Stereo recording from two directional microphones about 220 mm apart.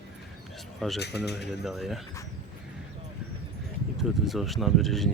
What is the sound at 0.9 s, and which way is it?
Speech, 50° left (ahead or behind).